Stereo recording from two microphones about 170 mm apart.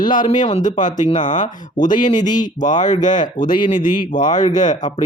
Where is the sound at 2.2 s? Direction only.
25° left (ahead or behind).